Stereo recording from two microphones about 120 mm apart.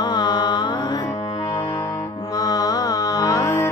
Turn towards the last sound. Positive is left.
turn(degrees=25)  # may be behind; listen again after turning